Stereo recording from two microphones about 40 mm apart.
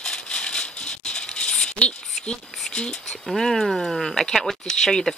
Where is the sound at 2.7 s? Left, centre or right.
Left.